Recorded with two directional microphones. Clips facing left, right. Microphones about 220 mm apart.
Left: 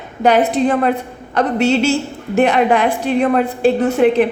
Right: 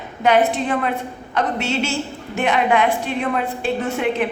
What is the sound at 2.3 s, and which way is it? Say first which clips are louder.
A woman's voice: left 5 dB; 35° left (ahead or behind).